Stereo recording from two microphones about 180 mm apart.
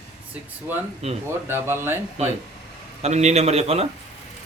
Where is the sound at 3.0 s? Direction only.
40° right (ahead or behind).